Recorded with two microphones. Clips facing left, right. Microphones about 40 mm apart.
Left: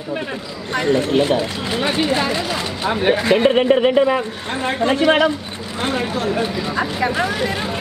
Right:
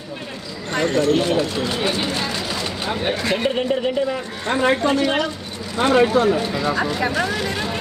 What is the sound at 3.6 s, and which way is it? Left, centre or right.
Speech, left.